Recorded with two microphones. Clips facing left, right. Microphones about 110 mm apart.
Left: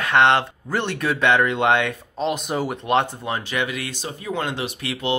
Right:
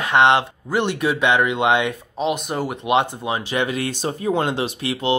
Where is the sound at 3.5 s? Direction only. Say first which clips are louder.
Right 4 dB; 35° right (ahead or behind).